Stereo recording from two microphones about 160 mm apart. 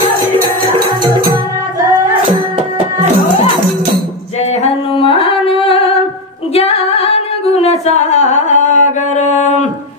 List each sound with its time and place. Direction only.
4.6 s music: 35° left (ahead or behind)
6.5 s singing: 40° left (ahead or behind)